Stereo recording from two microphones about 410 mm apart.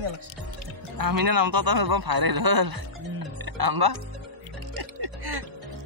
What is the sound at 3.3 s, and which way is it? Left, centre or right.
Music, right.